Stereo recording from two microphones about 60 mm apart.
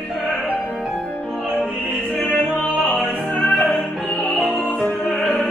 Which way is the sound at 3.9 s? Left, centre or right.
Centre.